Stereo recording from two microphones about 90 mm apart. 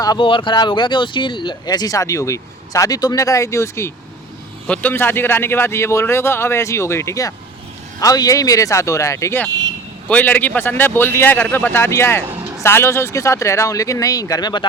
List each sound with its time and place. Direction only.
0.2 s speech: 70° left (ahead or behind); by 3.9 s 30° left (ahead or behind)
4.6 s a man's voice: 15° left (ahead or behind); by 9.4 s 35° left (ahead or behind)
10.1 s a man's voice: 20° left (ahead or behind); by 14.7 s 55° left (ahead or behind)